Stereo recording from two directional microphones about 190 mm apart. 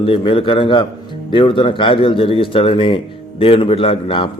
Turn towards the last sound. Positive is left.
turn(degrees=25)  # may be behind; listen again after turning